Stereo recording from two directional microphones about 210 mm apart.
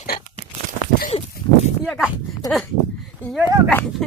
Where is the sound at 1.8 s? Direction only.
Centre (ahead or behind).